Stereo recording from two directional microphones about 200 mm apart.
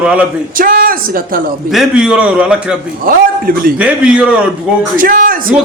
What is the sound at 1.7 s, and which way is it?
A man's voice, 5° right (ahead or behind).